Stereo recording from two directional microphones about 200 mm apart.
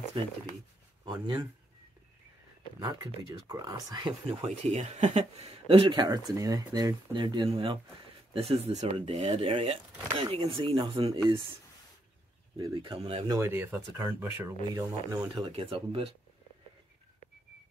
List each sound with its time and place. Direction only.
0.2 s speech: 30° right (ahead or behind)
2.8 s speech: 20° right (ahead or behind)
12.5 s speech: 20° right (ahead or behind)
13.4 s speech: 10° right (ahead or behind); by 16.1 s 30° right (ahead or behind)